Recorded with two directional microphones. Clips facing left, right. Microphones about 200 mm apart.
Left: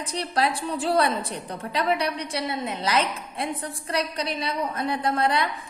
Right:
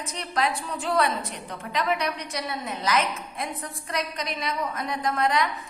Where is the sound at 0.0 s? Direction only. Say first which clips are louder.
Left 2 dB; 35° left (ahead or behind).